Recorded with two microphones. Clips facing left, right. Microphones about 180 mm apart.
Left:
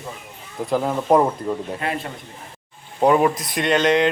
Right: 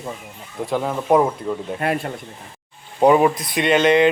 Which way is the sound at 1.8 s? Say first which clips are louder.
Right 8 dB; 55° right (ahead or behind).